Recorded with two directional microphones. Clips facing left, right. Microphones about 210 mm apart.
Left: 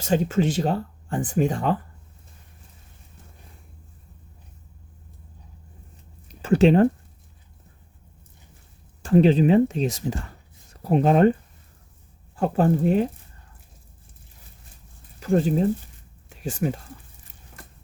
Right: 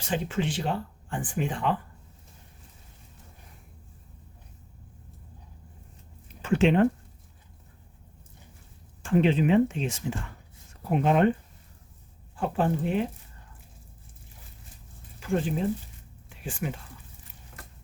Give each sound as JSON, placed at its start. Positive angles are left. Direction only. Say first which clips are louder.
{"t": 0.0, "sound": "speech", "louder": "left 7 dB", "side_deg": 40}
{"t": 6.2, "sound": "a sound", "louder": "left 5 dB", "side_deg": 40}
{"t": 9.0, "sound": "speech", "louder": "left 6 dB", "side_deg": 35}
{"t": 12.4, "sound": "speech", "louder": "left 6 dB", "side_deg": 40}
{"t": 15.2, "sound": "speech", "louder": "left 7 dB", "side_deg": 40}